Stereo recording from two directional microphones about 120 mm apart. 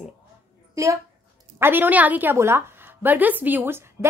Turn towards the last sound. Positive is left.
turn(degrees=-15)  # may be behind; listen again after turning